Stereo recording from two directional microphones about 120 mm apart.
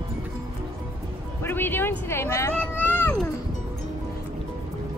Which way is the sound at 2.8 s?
15° left (ahead or behind).